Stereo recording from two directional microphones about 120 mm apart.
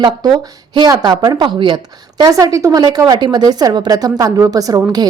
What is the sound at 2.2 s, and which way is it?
Speech, 30° right (ahead or behind).